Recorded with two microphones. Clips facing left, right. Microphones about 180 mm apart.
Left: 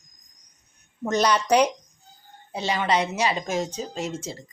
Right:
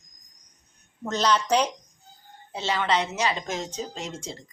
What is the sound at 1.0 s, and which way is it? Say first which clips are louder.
A woman's voice: left 2 dB; 10° left (ahead or behind).